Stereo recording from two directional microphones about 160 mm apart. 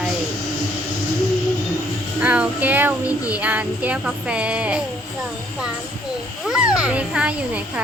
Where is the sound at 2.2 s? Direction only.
10° right (ahead or behind).